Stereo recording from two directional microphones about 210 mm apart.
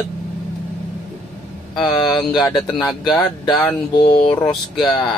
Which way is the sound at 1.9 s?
20° left (ahead or behind).